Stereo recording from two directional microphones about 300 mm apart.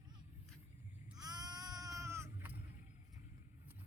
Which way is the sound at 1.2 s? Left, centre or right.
Centre.